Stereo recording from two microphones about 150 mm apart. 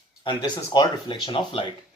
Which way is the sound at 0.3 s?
30° left (ahead or behind).